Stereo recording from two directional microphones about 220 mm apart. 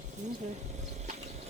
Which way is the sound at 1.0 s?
30° right (ahead or behind).